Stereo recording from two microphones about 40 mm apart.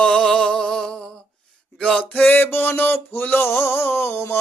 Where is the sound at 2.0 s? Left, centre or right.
Left.